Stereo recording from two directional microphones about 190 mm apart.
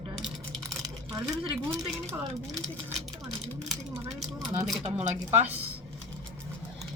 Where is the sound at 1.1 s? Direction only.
25° right (ahead or behind).